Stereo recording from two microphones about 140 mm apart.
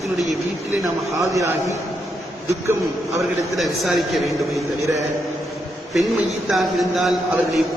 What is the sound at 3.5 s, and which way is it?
A man's voice, centre (ahead or behind).